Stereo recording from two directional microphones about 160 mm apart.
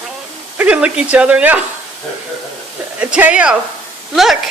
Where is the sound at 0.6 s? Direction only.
10° right (ahead or behind).